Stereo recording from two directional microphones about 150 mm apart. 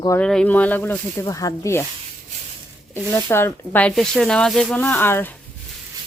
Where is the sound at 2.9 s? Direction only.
15° left (ahead or behind).